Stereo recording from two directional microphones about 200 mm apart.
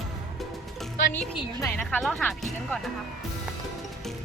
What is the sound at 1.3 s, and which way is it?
Speech, 15° left (ahead or behind).